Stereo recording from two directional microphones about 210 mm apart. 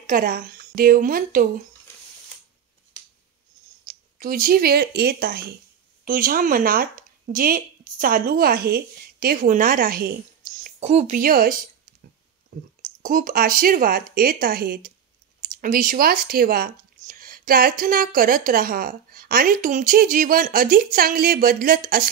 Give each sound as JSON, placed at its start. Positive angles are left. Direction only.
{"t": 0.0, "sound": "a woman's voice", "side_deg": -45}
{"t": 3.8, "sound": "speech", "side_deg": -40}
{"t": 13.0, "sound": "speech", "side_deg": -40}